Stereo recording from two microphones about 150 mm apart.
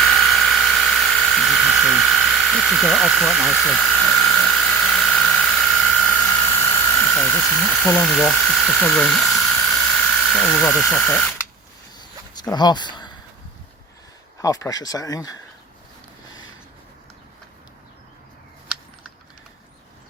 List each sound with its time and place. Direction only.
0.0 s electric toothbrush: centre (ahead or behind)
11.0 s speech: 10° left (ahead or behind)
11.9 s a sound: 25° left (ahead or behind)
14.4 s speech: 25° left (ahead or behind)